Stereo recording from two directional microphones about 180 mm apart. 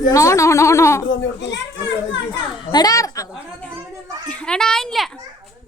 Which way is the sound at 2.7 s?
20° left (ahead or behind).